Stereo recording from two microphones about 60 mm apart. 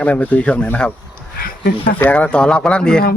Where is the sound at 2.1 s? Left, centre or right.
Centre.